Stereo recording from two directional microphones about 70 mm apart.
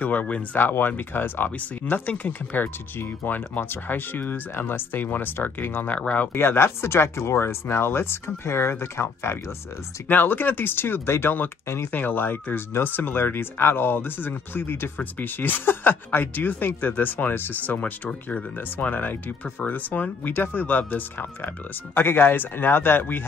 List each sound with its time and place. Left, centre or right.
0.0 s speech: left
6.3 s speech: left
10.0 s speech: left
11.9 s speech: left